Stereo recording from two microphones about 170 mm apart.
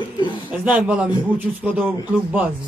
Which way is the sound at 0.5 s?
10° right (ahead or behind).